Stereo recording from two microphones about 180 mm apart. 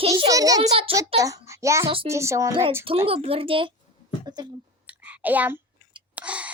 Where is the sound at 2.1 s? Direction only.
15° right (ahead or behind).